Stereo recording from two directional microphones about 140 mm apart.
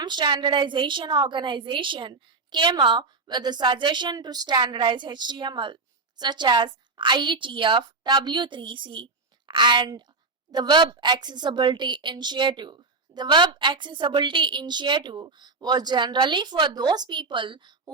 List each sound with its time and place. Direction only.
0.0 s a woman's voice: 30° right (ahead or behind)